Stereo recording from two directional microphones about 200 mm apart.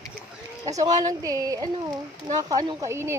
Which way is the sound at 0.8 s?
20° right (ahead or behind).